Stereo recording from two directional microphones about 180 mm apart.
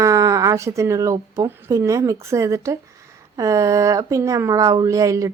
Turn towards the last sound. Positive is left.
turn(degrees=-15)  # may be behind; listen again after turning